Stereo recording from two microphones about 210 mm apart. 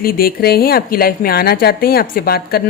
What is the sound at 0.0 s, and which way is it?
A woman's voice, 45° left (ahead or behind).